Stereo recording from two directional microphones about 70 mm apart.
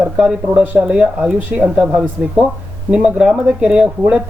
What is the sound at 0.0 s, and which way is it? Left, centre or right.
Speech, centre.